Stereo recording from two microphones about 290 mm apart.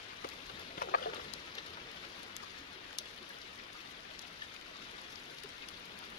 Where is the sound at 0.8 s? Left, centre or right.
Left.